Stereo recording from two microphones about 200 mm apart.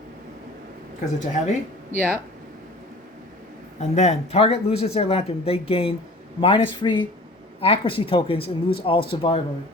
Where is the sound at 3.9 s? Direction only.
35° left (ahead or behind).